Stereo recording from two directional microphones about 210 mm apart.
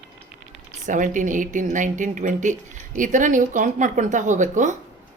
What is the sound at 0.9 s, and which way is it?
Speech, 35° right (ahead or behind).